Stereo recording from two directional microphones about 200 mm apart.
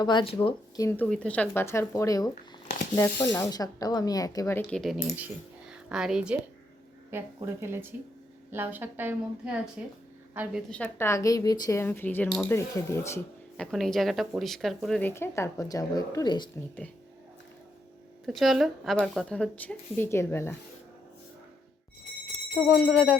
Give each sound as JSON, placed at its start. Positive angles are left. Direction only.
{"t": 0.0, "sound": "speech", "side_deg": 20}
{"t": 2.3, "sound": "shuffling cards", "side_deg": 40}
{"t": 3.3, "sound": "a woman's voice", "side_deg": 15}
{"t": 10.7, "sound": "speech", "side_deg": 10}
{"t": 13.7, "sound": "speech", "side_deg": 0}
{"t": 18.3, "sound": "speech", "side_deg": 0}
{"t": 22.6, "sound": "speech", "side_deg": 5}